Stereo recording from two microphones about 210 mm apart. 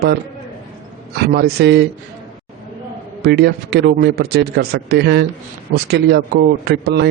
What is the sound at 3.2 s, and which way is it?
Speech, 50° right (ahead or behind).